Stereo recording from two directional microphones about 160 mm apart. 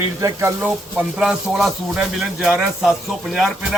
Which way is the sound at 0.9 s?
5° right (ahead or behind).